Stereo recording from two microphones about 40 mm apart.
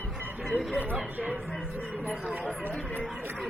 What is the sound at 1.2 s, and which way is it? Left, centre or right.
Speech, right.